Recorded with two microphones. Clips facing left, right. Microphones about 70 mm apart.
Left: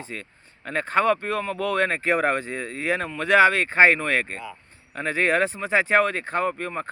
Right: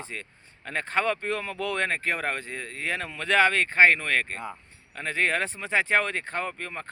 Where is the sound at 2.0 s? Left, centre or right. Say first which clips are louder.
Left 7 dB; centre.